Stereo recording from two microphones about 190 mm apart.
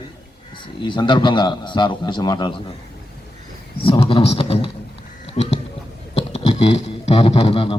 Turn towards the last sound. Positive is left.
turn(degrees=30)  # may be behind; listen again after turning